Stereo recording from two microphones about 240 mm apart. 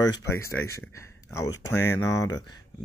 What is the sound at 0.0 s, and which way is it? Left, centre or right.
Speech, centre.